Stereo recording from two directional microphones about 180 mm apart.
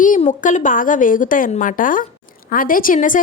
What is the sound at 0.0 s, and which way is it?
A woman's voice, 45° left (ahead or behind).